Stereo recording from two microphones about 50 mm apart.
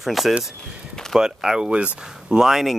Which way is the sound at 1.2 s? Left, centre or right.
Centre.